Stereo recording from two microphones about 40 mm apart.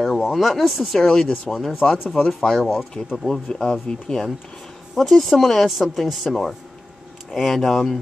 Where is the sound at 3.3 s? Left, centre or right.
Centre.